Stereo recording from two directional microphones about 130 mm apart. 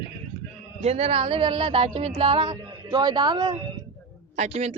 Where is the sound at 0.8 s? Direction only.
55° right (ahead or behind); by 3.6 s 35° right (ahead or behind).